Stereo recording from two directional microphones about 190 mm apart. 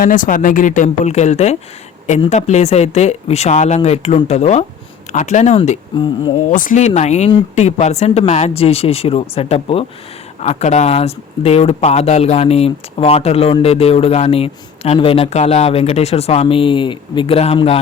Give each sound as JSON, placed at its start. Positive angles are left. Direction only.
{"t": 0.0, "sound": "speech", "side_deg": 45}